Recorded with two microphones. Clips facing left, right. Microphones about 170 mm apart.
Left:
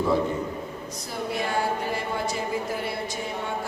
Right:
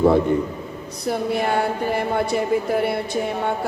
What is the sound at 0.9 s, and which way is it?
A woman's voice, 60° right (ahead or behind).